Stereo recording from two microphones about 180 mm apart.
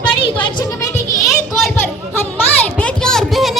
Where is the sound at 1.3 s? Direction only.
Centre (ahead or behind).